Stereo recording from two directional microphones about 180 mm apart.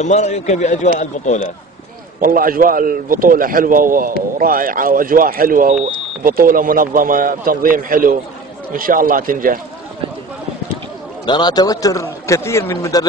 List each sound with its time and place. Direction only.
0.0 s speech: 40° left (ahead or behind)
2.1 s a man's voice: 50° right (ahead or behind)
11.2 s a man's voice: 25° left (ahead or behind)